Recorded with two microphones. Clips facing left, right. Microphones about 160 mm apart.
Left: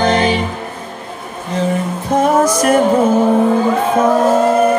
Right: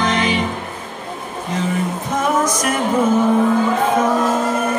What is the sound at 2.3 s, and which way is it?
Music, 30° left (ahead or behind).